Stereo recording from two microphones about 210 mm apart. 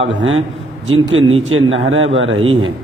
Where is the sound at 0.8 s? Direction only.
70° right (ahead or behind).